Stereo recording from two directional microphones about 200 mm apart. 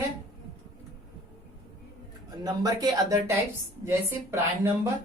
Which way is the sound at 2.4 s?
20° right (ahead or behind).